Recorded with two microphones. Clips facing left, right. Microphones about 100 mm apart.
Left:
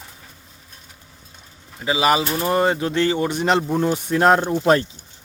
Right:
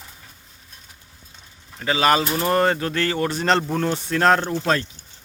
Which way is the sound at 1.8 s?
15° left (ahead or behind).